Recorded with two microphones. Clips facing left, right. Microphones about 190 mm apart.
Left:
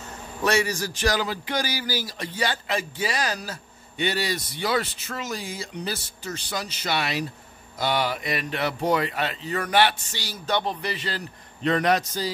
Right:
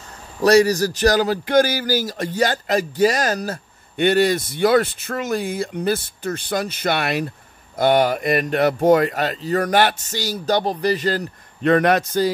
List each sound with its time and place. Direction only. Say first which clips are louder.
0.4 s speech: right 10 dB; 40° right (ahead or behind); by 12.3 s 55° right (ahead or behind)